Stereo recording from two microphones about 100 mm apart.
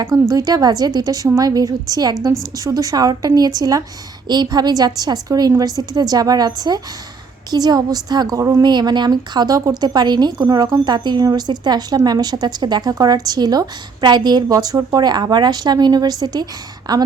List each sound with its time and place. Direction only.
0.1 s a woman's voice: 35° right (ahead or behind)
8.6 s a woman's voice: 50° right (ahead or behind)